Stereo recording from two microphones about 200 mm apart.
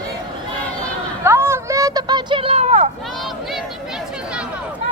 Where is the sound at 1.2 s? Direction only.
15° right (ahead or behind); by 2.8 s 35° right (ahead or behind).